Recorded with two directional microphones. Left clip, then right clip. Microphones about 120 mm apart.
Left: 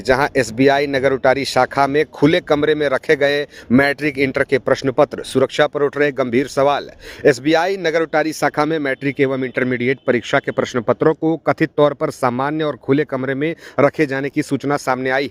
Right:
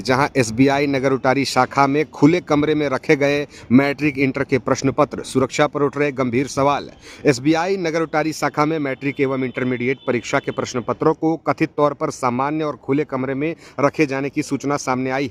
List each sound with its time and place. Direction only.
0.0 s speech: 15° left (ahead or behind)